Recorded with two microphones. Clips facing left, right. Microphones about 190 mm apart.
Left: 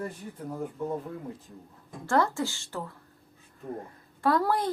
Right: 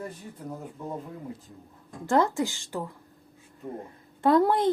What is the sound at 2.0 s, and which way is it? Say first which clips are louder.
Speech: right 2 dB; 20° right (ahead or behind).